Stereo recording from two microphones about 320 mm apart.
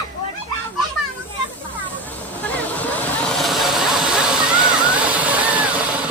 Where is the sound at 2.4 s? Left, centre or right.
Centre.